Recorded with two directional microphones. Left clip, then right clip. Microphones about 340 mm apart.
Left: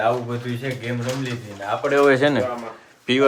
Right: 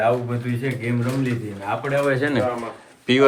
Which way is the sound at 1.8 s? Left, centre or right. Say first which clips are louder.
Left 6 dB; centre.